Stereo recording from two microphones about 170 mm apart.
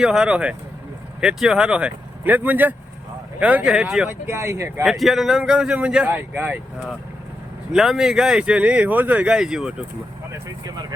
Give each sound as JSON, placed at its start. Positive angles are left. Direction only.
{"t": 0.0, "sound": "speech", "side_deg": -5}
{"t": 4.1, "sound": "speech", "side_deg": -15}
{"t": 4.8, "sound": "speech", "side_deg": 0}
{"t": 10.3, "sound": "speech", "side_deg": -20}